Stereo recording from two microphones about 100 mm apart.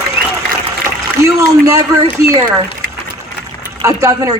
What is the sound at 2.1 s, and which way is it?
Speech, 30° right (ahead or behind).